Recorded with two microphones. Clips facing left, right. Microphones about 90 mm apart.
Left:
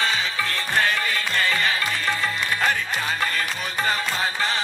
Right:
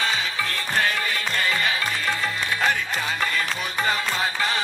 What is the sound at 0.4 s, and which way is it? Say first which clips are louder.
Music: left 2 dB; 40° left (ahead or behind).